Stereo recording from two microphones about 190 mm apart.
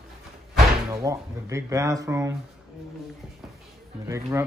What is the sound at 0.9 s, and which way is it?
Speech, 15° right (ahead or behind).